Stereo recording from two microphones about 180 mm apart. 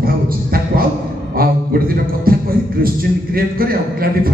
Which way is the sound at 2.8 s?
55° right (ahead or behind).